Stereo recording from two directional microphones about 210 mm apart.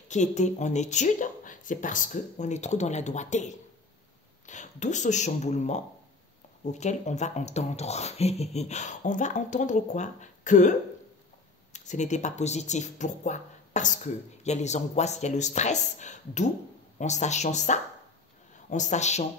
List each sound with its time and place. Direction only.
0.1 s speech: 35° left (ahead or behind)